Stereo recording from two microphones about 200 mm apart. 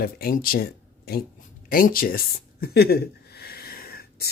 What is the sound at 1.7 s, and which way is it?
Speech, 45° left (ahead or behind).